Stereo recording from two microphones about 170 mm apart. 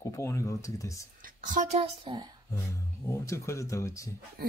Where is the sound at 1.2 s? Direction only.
50° right (ahead or behind).